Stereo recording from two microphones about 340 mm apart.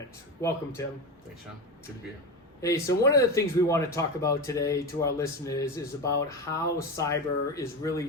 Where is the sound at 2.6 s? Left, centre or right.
Centre.